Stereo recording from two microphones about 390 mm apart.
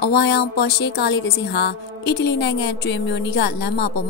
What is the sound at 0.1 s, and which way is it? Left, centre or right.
Speech, left.